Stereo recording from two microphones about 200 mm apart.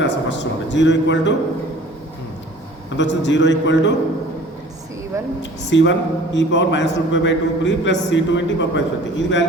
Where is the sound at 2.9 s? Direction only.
65° left (ahead or behind).